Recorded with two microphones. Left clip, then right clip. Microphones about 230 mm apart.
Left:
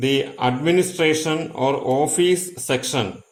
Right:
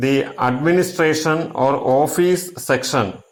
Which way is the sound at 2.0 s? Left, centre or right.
Right.